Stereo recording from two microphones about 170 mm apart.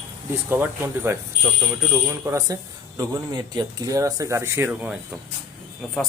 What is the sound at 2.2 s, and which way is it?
Speech, 15° right (ahead or behind).